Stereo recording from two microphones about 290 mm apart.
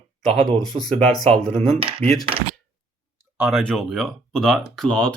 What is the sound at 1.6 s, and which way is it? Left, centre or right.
Speech, right.